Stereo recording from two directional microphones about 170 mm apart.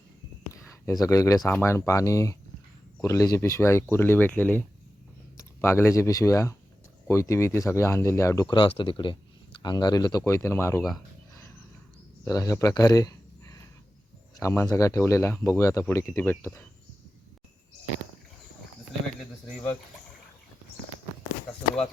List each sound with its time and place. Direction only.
0.9 s speech: 20° left (ahead or behind)
12.2 s speech: 20° left (ahead or behind)